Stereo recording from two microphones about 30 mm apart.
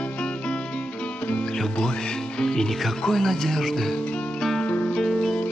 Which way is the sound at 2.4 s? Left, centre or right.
Centre.